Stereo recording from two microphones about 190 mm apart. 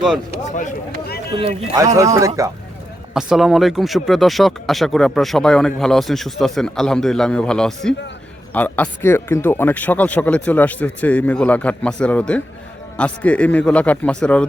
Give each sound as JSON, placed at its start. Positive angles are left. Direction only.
{"t": 0.4, "sound": "speech", "side_deg": 40}
{"t": 1.4, "sound": "speech", "side_deg": -25}
{"t": 3.2, "sound": "speech", "side_deg": 0}